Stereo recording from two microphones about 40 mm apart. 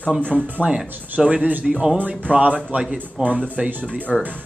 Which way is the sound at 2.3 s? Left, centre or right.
Right.